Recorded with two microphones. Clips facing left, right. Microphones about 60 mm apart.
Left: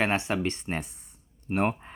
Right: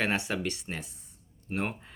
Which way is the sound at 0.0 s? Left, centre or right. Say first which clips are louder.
Left 3 dB; left.